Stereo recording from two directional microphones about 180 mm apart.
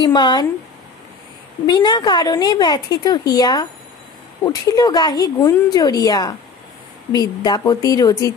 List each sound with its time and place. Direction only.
0.0 s a woman's voice: 25° left (ahead or behind)
1.7 s a woman's voice: 25° left (ahead or behind)